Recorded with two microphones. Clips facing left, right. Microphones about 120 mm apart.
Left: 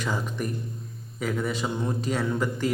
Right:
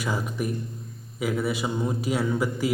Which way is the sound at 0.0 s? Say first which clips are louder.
Right 1 dB; 10° right (ahead or behind).